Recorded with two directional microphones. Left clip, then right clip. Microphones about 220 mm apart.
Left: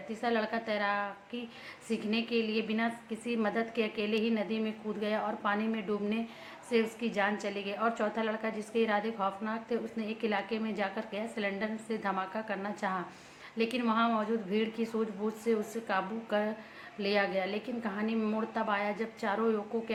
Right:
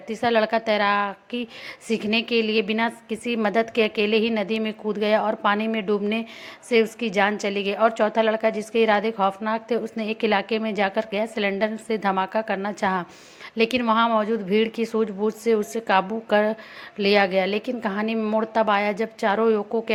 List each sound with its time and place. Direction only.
0.1 s a woman's voice: 35° right (ahead or behind)